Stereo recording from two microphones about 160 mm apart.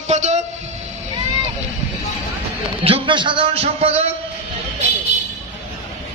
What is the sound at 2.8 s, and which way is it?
A man's voice, 35° right (ahead or behind).